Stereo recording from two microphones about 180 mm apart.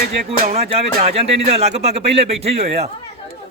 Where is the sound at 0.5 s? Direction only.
35° right (ahead or behind).